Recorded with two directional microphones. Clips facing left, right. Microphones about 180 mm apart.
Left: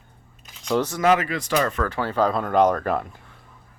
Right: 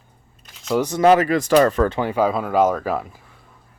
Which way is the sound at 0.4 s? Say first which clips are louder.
Right 2 dB; centre (ahead or behind).